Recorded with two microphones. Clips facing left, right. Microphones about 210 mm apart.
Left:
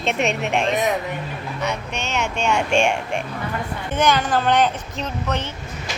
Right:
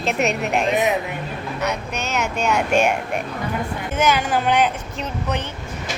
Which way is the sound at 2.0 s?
5° right (ahead or behind).